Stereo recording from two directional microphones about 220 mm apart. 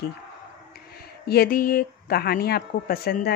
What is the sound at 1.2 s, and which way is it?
Speech, 45° left (ahead or behind).